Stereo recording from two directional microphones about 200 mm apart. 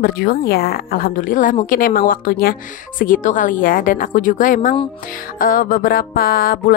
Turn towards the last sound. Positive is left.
turn(degrees=45)  # may be behind; listen again after turning